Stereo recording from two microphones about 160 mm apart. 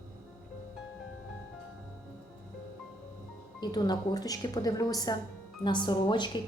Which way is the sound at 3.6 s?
25° left (ahead or behind).